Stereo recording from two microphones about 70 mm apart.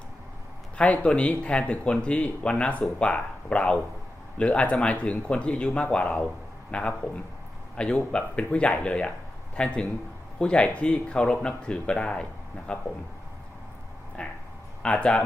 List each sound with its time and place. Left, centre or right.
0.8 s speech: centre
14.2 s speech: centre